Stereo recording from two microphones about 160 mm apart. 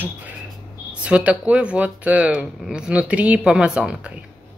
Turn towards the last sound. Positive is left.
turn(degrees=-5)  # may be behind; listen again after turning